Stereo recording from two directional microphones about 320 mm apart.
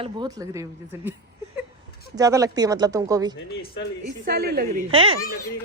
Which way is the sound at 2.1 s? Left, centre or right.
Centre.